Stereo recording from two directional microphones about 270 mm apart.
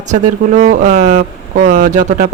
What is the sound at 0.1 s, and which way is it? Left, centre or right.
Speech, right.